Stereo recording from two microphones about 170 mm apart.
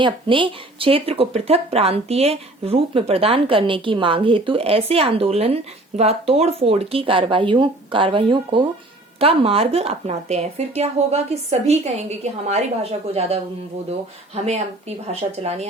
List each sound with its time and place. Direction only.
0.0 s speech: 30° right (ahead or behind)